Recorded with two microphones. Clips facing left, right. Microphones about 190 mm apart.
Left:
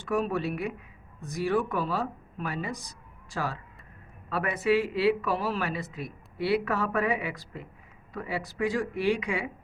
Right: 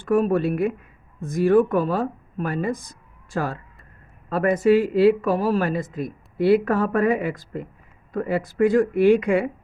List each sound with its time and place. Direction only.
0.0 s speech: 55° right (ahead or behind)